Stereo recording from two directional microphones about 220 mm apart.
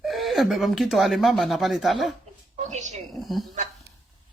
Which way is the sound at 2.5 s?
35° right (ahead or behind).